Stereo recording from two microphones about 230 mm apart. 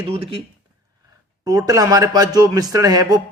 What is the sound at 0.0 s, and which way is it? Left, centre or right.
Speech, right.